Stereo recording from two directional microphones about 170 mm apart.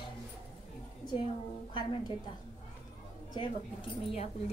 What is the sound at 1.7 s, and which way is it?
Music, 30° left (ahead or behind).